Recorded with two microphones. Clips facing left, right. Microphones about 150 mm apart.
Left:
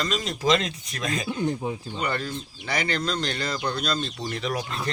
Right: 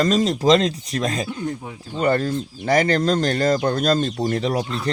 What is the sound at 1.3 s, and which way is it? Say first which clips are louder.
Speech: left 1 dB; 20° left (ahead or behind).